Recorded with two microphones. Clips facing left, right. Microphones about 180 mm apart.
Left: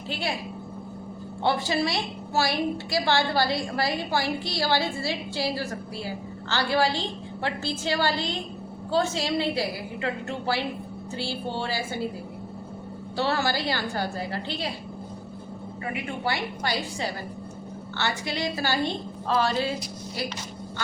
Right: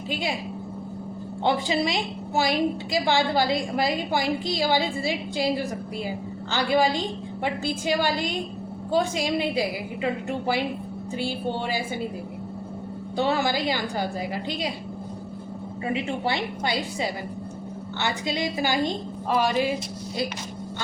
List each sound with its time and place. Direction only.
0.1 s a woman's voice: 15° right (ahead or behind)
1.5 s a woman's voice: 15° right (ahead or behind)
13.1 s a woman's voice: 15° right (ahead or behind)
15.9 s a woman's voice: 25° right (ahead or behind)